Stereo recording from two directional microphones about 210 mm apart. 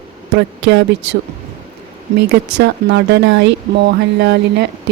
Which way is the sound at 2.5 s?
55° right (ahead or behind).